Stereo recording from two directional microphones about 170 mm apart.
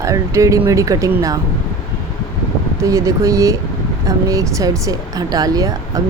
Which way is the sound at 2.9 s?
20° right (ahead or behind).